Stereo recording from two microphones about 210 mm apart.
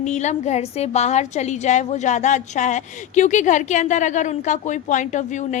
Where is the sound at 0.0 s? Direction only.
35° left (ahead or behind).